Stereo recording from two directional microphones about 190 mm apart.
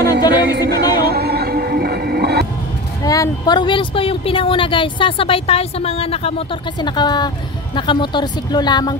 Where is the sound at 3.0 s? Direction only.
20° left (ahead or behind).